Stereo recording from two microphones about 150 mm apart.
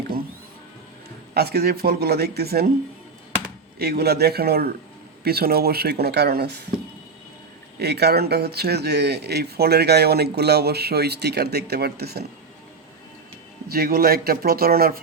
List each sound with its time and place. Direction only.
1.3 s speech: 90° right
3.8 s speech: 90° right
7.8 s speech: 90° right
13.7 s speech: 90° right